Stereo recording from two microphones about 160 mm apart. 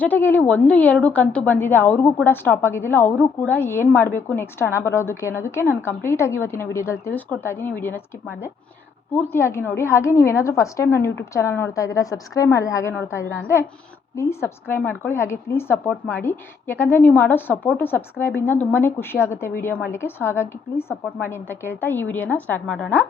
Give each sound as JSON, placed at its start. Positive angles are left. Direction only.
{"t": 0.0, "sound": "a woman's voice", "side_deg": 10}